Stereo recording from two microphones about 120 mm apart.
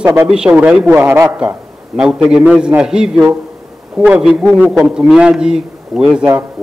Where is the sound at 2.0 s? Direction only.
5° right (ahead or behind).